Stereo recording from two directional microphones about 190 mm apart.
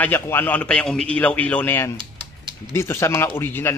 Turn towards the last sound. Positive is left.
turn(degrees=10)  # may be behind; listen again after turning